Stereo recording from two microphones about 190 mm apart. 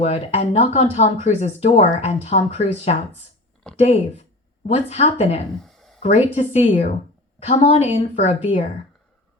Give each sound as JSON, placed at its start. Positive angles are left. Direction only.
{"t": 0.0, "sound": "speech", "side_deg": 35}
{"t": 3.8, "sound": "speech", "side_deg": 35}
{"t": 5.5, "sound": "a sound", "side_deg": 0}
{"t": 6.0, "sound": "speech", "side_deg": 30}